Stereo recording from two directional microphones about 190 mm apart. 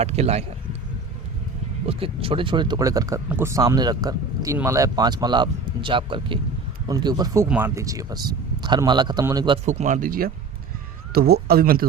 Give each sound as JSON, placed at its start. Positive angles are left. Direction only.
{"t": 0.0, "sound": "speech", "side_deg": -35}
{"t": 1.9, "sound": "speech", "side_deg": -30}
{"t": 7.4, "sound": "speech", "side_deg": -10}
{"t": 9.6, "sound": "speech", "side_deg": -40}